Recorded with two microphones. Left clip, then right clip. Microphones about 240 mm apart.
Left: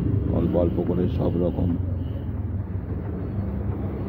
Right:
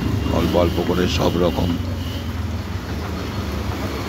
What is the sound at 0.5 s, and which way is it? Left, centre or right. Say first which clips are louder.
Speech: right 5 dB; right.